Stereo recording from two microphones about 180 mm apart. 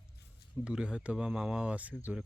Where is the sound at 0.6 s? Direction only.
5° right (ahead or behind).